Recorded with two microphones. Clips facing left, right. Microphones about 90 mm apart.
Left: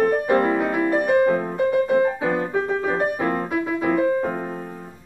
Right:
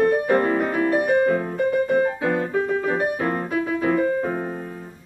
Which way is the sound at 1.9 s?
10° left (ahead or behind).